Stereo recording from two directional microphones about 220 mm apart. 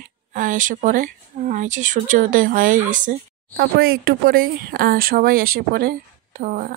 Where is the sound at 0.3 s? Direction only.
35° right (ahead or behind).